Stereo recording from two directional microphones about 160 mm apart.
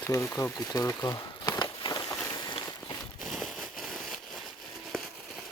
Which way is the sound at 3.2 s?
Centre (ahead or behind).